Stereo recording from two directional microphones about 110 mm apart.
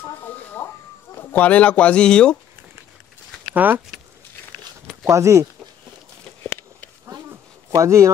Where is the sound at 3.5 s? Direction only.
15° right (ahead or behind).